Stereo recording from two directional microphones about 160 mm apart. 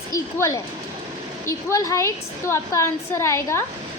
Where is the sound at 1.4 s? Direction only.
20° left (ahead or behind).